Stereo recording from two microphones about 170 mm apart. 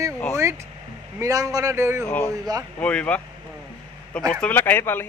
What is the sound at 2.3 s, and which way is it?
Speech, 20° right (ahead or behind).